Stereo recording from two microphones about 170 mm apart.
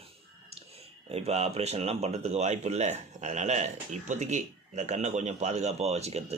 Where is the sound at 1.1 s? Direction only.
40° right (ahead or behind).